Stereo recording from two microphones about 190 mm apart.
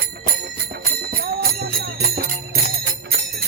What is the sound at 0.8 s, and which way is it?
Jingle bell, 50° right (ahead or behind).